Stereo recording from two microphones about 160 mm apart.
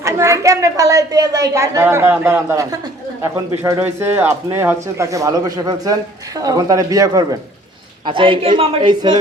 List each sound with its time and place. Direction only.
0.0 s speech: 20° right (ahead or behind)
8.0 s a woman's voice: 30° right (ahead or behind)